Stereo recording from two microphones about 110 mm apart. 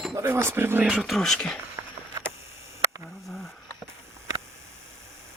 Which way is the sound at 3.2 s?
Centre (ahead or behind).